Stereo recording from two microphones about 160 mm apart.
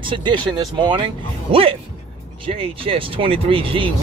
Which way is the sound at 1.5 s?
35° right (ahead or behind).